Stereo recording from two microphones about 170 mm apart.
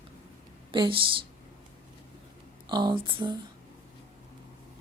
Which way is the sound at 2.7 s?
25° right (ahead or behind).